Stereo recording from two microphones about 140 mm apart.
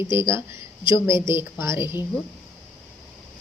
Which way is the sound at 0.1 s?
20° right (ahead or behind).